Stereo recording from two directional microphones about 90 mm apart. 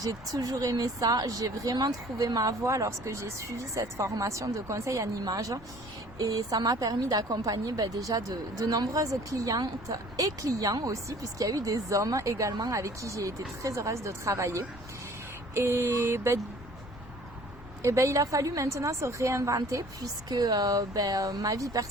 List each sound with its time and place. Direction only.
0.0 s a woman's voice: 40° right (ahead or behind)
15.5 s a sound: 25° right (ahead or behind)
17.8 s a woman's voice: 35° right (ahead or behind)